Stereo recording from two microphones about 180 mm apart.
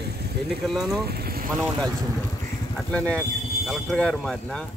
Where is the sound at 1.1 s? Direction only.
60° right (ahead or behind).